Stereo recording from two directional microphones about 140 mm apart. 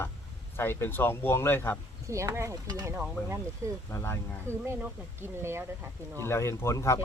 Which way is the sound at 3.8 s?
20° left (ahead or behind).